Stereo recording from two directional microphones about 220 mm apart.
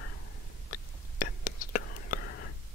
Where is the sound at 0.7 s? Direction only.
40° left (ahead or behind).